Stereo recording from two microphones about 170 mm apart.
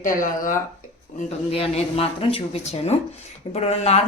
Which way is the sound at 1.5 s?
35° left (ahead or behind).